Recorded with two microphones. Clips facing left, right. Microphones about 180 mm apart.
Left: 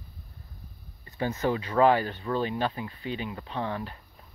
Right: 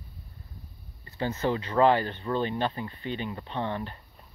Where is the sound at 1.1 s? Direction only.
15° left (ahead or behind).